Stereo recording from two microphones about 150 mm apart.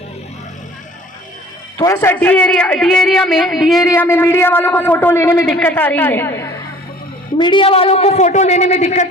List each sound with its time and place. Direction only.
1.8 s a man's voice: 15° left (ahead or behind); by 3.8 s centre (ahead or behind)
3.8 s a man's voice: 20° left (ahead or behind)
7.3 s a man's voice: 30° left (ahead or behind); by 9.0 s 50° left (ahead or behind)